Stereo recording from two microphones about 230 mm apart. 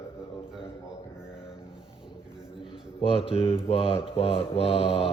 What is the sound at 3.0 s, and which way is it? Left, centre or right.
Mantra, left.